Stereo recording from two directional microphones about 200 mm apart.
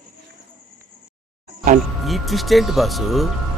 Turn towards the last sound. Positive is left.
turn(degrees=0)  # may be behind; listen again after turning